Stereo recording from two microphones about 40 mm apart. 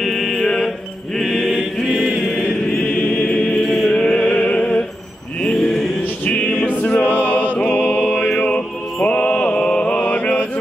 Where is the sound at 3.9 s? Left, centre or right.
Left.